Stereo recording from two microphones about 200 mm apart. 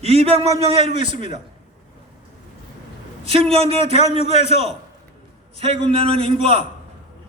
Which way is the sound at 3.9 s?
35° left (ahead or behind).